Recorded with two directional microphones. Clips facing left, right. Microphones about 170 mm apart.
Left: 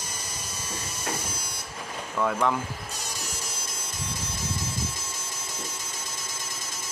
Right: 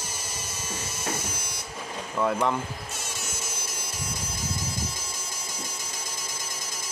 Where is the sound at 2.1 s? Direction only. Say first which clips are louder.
Even; 5° right (ahead or behind).